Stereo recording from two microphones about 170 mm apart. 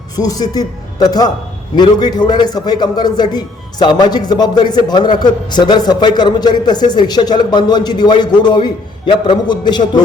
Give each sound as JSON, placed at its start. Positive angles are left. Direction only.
{"t": 0.2, "sound": "a man's voice", "side_deg": 20}